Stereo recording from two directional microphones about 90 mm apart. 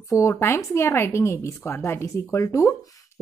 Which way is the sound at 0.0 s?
35° left (ahead or behind).